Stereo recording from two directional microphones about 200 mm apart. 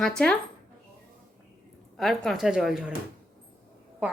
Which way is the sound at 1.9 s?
Centre (ahead or behind).